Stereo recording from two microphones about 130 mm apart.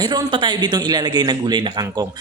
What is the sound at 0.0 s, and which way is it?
Speech, 35° right (ahead or behind).